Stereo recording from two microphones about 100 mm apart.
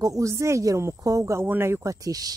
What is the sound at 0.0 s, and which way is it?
Speech, 35° right (ahead or behind).